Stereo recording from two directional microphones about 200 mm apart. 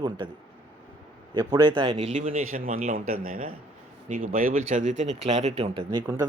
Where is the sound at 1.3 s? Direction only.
20° right (ahead or behind).